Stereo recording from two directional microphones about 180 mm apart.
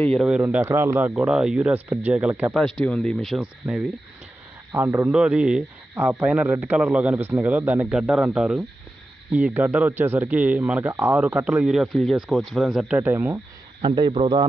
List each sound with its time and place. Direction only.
0.0 s speech: centre (ahead or behind)
0.4 s speech: 10° right (ahead or behind)
4.7 s speech: 15° right (ahead or behind)
13.7 s speech: 25° right (ahead or behind)